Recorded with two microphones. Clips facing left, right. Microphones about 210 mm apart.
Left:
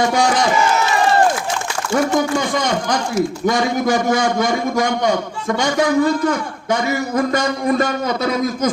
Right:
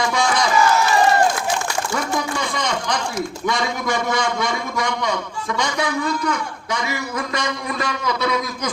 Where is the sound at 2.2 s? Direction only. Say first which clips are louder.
Left 6 dB; 45° left (ahead or behind).